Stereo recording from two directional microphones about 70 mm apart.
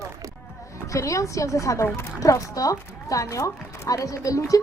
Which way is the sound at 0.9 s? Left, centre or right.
Left.